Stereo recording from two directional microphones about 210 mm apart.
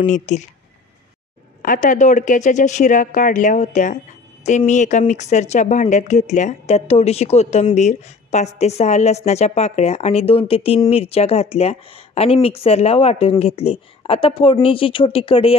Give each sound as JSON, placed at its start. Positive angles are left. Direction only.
{"t": 0.0, "sound": "speech", "side_deg": 35}
{"t": 1.6, "sound": "speech", "side_deg": 40}